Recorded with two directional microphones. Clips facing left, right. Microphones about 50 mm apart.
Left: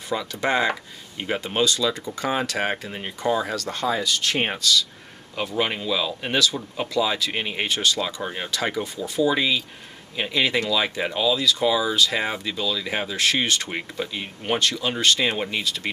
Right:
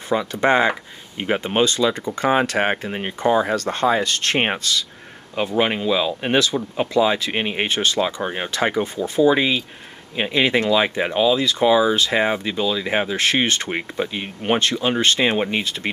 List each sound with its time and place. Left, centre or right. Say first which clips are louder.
0.1 s speech: right 6 dB; right